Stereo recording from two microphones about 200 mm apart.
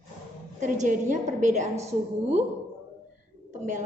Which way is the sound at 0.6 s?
40° right (ahead or behind).